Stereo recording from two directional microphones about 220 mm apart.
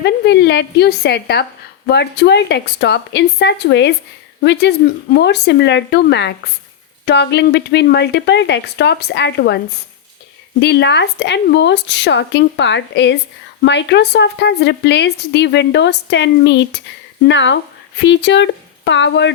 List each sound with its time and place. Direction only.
0.0 s a woman's voice: 50° left (ahead or behind)
10.6 s a woman's voice: 50° left (ahead or behind)